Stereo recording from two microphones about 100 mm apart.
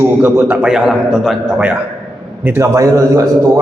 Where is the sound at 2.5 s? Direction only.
30° right (ahead or behind).